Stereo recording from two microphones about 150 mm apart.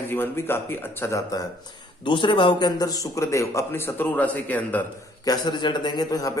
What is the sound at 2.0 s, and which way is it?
Speech, 30° left (ahead or behind).